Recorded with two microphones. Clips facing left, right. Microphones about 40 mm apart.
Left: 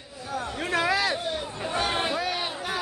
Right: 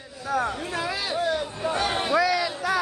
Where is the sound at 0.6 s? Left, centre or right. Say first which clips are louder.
Left 4 dB; left.